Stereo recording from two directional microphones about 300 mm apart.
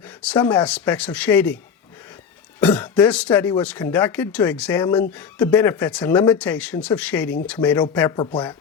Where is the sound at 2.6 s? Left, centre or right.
Centre.